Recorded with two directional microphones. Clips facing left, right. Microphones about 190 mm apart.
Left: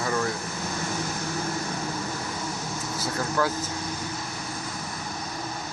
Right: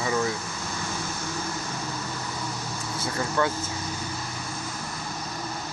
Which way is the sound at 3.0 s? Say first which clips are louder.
Even; centre (ahead or behind).